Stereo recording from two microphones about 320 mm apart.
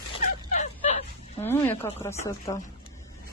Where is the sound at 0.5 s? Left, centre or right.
Left.